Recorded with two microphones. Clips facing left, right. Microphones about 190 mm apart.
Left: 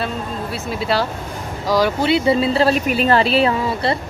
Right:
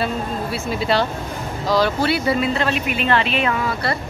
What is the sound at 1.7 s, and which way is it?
Speech, 10° left (ahead or behind).